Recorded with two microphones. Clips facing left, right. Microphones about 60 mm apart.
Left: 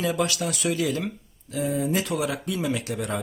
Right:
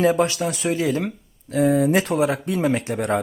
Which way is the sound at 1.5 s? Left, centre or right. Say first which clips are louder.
Right 8 dB; right.